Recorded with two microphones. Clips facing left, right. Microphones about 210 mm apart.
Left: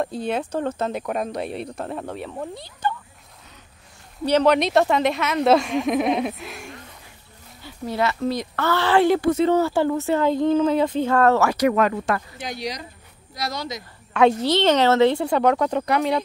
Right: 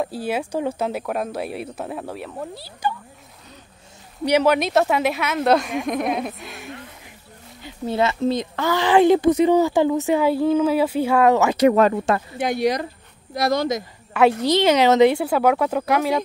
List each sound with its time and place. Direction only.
0.0 s speech: 5° right (ahead or behind)
4.2 s speech: 10° right (ahead or behind)
7.6 s a woman's voice: 25° right (ahead or behind)
12.4 s speech: 55° right (ahead or behind)
14.4 s speech: 10° right (ahead or behind)